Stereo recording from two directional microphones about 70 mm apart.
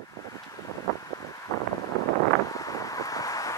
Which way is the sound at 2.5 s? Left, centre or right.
Left.